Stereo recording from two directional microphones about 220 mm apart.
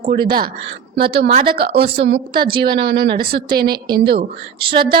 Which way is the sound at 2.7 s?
50° right (ahead or behind).